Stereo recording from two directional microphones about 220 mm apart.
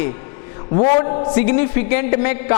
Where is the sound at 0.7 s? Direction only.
30° left (ahead or behind).